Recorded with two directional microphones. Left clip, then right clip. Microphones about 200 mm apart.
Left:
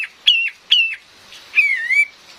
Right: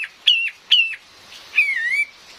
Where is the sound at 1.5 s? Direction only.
5° left (ahead or behind).